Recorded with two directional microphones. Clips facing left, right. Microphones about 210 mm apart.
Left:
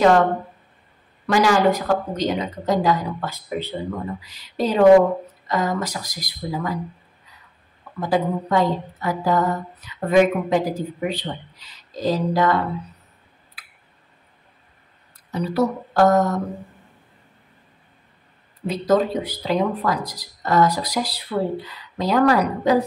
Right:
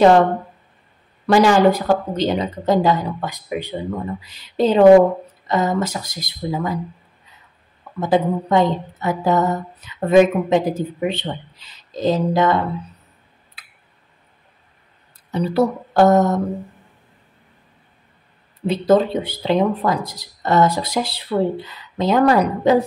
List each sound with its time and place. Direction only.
1.2 s a woman's voice: 30° right (ahead or behind)
4.2 s a woman's voice: 25° right (ahead or behind)
8.0 s a woman's voice: 20° right (ahead or behind)
15.3 s a woman's voice: 30° right (ahead or behind)
18.7 s a woman's voice: 25° right (ahead or behind)